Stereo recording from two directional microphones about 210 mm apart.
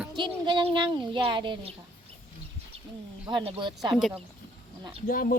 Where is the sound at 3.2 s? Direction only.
25° right (ahead or behind).